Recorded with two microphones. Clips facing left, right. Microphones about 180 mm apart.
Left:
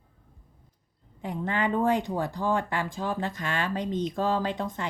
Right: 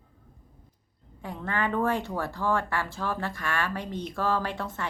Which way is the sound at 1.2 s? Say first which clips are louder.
Left 2 dB; 15° left (ahead or behind).